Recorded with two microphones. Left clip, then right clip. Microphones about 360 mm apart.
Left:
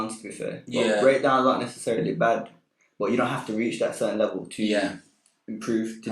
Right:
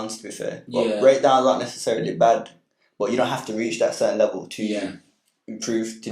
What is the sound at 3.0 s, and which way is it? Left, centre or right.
Speech, right.